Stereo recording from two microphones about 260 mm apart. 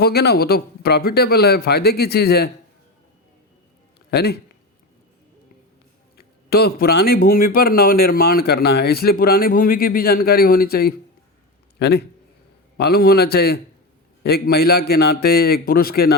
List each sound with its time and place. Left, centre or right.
0.0 s speech: left
4.1 s speech: left
6.1 s speech: left